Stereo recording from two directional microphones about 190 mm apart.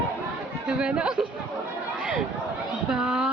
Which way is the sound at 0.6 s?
5° right (ahead or behind).